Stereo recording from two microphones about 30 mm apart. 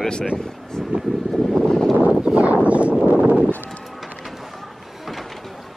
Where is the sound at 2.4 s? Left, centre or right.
Right.